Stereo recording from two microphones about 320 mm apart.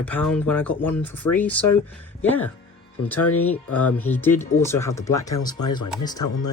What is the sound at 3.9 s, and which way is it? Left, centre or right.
Speech, centre.